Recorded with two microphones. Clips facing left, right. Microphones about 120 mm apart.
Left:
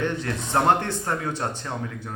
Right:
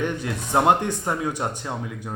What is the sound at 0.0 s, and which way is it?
Speech, 15° right (ahead or behind).